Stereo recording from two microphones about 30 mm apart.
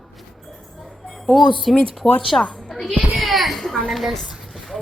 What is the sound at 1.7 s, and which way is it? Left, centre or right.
Speech, centre.